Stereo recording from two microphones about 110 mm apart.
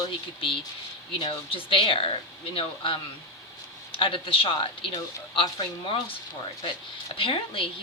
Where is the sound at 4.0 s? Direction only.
55° left (ahead or behind).